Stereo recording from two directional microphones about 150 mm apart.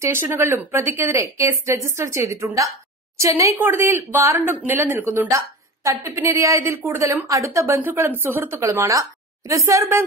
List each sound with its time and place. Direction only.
0.0 s a woman's voice: 15° right (ahead or behind)